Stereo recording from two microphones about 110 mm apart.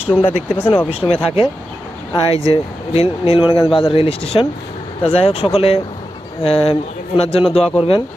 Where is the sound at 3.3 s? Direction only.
55° left (ahead or behind).